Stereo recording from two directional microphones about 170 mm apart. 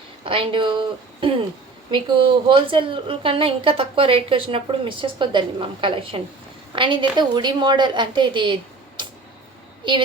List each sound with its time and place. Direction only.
0.3 s a woman's voice: 30° right (ahead or behind)
9.8 s a woman's voice: 30° right (ahead or behind)